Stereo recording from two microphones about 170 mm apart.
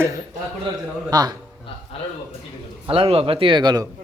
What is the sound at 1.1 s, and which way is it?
Speech, 25° right (ahead or behind).